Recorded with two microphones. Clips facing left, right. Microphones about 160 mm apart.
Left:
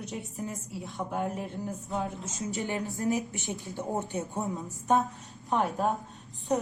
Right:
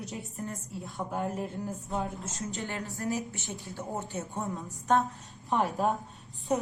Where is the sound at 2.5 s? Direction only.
15° left (ahead or behind).